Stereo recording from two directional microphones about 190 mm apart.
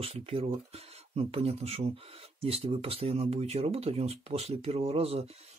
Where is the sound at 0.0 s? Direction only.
30° right (ahead or behind).